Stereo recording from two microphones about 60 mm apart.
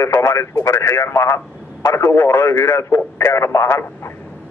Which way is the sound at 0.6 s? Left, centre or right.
Left.